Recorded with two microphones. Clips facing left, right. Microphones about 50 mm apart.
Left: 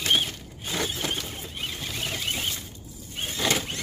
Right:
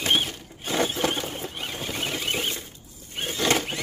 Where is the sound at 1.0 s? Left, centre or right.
Right.